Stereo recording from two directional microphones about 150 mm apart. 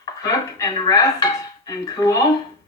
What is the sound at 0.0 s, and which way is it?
Dishes, 25° left (ahead or behind).